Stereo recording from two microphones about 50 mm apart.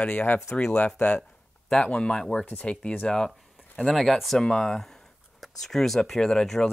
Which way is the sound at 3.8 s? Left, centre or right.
Centre.